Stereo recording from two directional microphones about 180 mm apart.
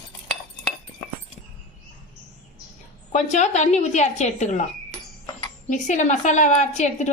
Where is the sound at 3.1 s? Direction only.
40° left (ahead or behind).